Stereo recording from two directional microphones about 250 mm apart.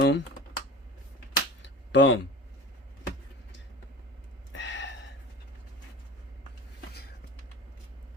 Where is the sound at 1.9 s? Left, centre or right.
Left.